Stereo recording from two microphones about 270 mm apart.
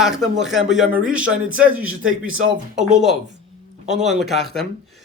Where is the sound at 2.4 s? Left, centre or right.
Right.